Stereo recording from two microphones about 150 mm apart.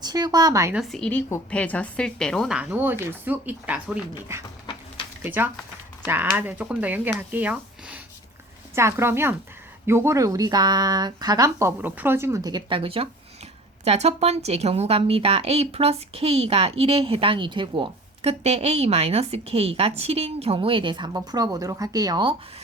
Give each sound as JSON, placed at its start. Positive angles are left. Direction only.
{"t": 0.0, "sound": "speech", "side_deg": -25}
{"t": 0.7, "sound": "a woman's voice", "side_deg": 0}
{"t": 2.6, "sound": "speech", "side_deg": -10}
{"t": 4.6, "sound": "a sound", "side_deg": 35}
{"t": 5.2, "sound": "a woman's voice", "side_deg": -15}